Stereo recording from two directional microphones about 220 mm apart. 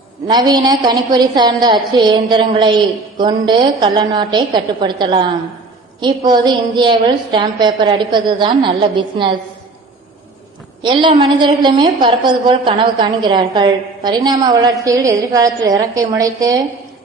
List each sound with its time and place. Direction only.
0.3 s a woman's voice: 20° right (ahead or behind)
10.8 s a woman's voice: 20° right (ahead or behind)